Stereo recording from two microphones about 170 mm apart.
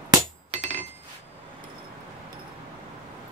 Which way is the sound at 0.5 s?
45° right (ahead or behind).